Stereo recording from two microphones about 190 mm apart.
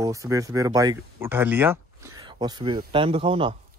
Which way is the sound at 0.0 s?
15° right (ahead or behind).